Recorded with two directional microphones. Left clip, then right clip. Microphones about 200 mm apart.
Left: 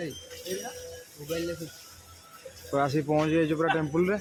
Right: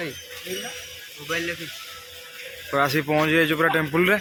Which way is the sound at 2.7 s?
Centre (ahead or behind).